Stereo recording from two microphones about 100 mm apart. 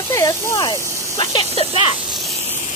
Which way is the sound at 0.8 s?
30° right (ahead or behind).